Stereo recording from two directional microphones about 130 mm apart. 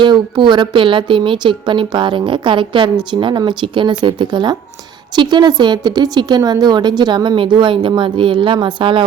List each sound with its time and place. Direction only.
0.0 s a woman's voice: 35° right (ahead or behind)